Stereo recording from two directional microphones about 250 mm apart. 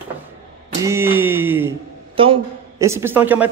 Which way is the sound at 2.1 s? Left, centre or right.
Right.